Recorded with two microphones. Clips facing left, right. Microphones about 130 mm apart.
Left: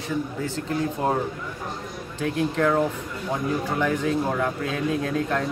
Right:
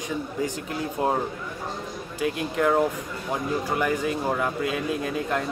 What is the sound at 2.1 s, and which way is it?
Speech, 5° right (ahead or behind).